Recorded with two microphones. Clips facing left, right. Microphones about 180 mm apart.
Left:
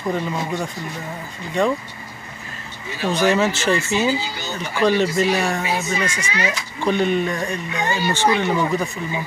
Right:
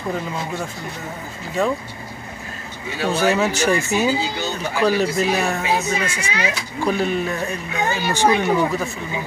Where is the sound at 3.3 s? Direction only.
10° right (ahead or behind).